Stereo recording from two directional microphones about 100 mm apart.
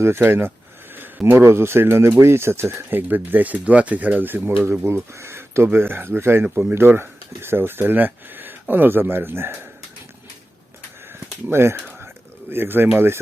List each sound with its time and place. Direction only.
0.0 s speech: 25° right (ahead or behind)
11.4 s speech: 25° right (ahead or behind)